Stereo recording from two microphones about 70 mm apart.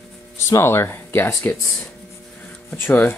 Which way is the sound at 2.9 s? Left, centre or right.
Left.